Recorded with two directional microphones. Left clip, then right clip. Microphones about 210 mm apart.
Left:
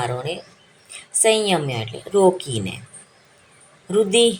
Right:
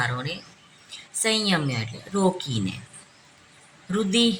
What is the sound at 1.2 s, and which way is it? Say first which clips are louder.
A woman's voice: left 6 dB; 15° left (ahead or behind).